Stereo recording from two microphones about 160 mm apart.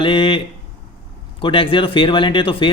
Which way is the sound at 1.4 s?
35° left (ahead or behind).